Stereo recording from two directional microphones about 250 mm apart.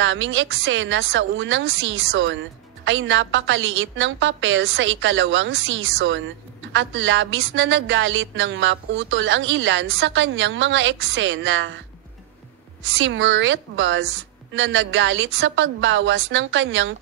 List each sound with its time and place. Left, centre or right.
0.0 s a woman's voice: right
12.9 s a woman's voice: right